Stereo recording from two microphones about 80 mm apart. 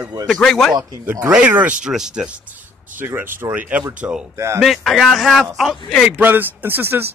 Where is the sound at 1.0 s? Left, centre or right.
Right.